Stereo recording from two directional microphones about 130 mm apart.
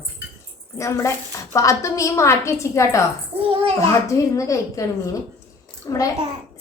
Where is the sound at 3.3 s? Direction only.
15° right (ahead or behind).